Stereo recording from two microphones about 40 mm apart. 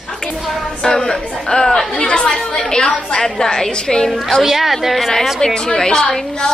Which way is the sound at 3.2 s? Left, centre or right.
Centre.